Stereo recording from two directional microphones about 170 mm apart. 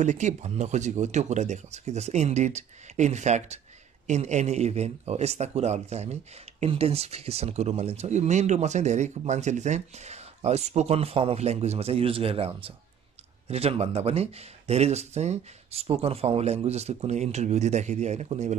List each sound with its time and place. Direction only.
0.0 s speech: 45° right (ahead or behind)